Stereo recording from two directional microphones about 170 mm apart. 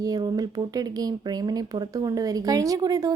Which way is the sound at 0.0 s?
20° right (ahead or behind).